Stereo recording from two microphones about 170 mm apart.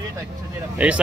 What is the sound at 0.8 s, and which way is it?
Speech, 5° right (ahead or behind).